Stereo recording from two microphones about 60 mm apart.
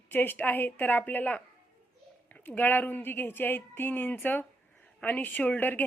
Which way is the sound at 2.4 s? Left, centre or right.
Left.